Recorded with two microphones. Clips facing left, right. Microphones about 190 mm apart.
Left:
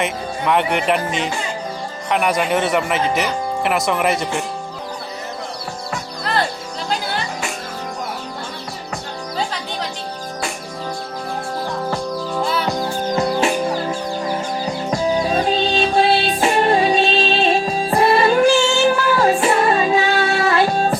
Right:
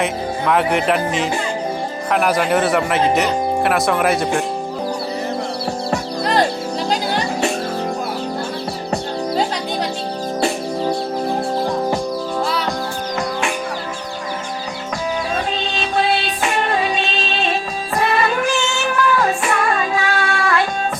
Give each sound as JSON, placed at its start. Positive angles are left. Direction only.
{"t": 0.0, "sound": "speech", "side_deg": 0}
{"t": 5.9, "sound": "music", "side_deg": -40}
{"t": 8.9, "sound": "music", "side_deg": -40}
{"t": 16.2, "sound": "music", "side_deg": 30}
{"t": 17.9, "sound": "music", "side_deg": 30}